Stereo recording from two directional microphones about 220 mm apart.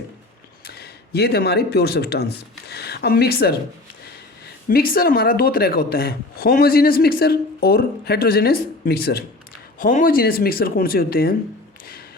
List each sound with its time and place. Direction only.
0.6 s speech: 45° left (ahead or behind)